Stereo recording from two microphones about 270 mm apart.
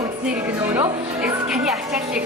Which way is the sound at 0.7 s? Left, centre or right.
Centre.